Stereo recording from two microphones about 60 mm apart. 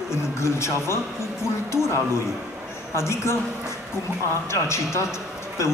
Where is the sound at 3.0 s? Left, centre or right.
Left.